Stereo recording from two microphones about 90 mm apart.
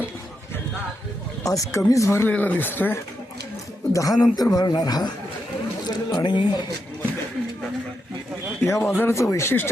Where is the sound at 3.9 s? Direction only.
40° left (ahead or behind); by 6.5 s 60° left (ahead or behind).